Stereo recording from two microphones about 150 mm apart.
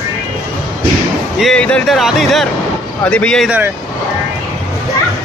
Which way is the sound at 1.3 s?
5° left (ahead or behind).